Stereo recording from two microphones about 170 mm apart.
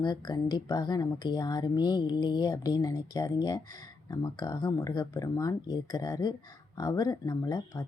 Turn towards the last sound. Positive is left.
turn(degrees=20)  # may be behind; listen again after turning